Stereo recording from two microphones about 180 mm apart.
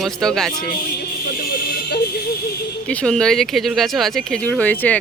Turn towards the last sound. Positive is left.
turn(degrees=10)  # may be behind; listen again after turning